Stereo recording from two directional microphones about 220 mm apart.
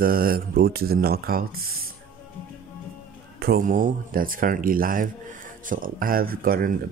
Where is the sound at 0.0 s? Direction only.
40° right (ahead or behind).